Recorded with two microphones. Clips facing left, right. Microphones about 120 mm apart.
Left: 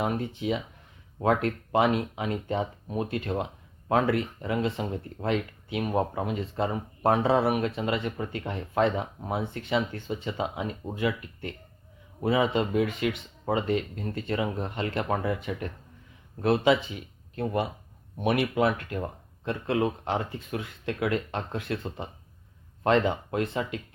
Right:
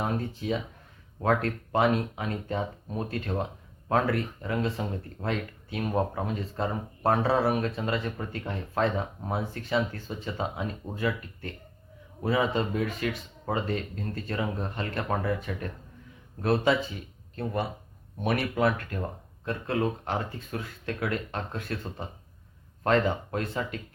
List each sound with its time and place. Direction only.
0.0 s speech: 20° left (ahead or behind)